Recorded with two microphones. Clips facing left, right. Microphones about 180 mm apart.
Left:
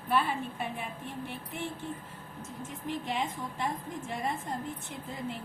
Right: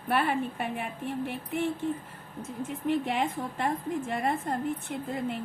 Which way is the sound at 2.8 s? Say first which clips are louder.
Right 6 dB; 60° right (ahead or behind).